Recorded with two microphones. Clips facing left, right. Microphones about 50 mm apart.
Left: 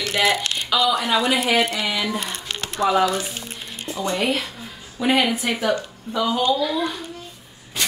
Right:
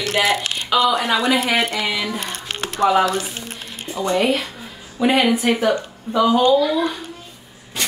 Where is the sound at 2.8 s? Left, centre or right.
Right.